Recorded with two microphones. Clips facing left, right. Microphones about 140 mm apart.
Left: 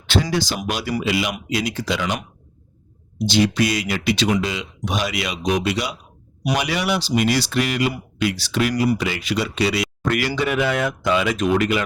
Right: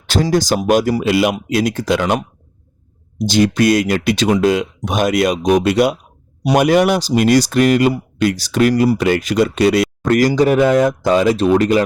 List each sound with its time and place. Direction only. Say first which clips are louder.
0.1 s speech: right 6 dB; 45° right (ahead or behind)
3.2 s speech: right 4 dB; 45° right (ahead or behind)